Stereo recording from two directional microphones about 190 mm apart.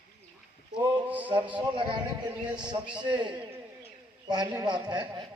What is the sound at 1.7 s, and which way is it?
A man's voice, 25° right (ahead or behind).